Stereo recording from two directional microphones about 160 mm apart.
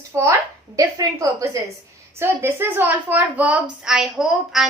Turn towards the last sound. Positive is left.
turn(degrees=-5)  # may be behind; listen again after turning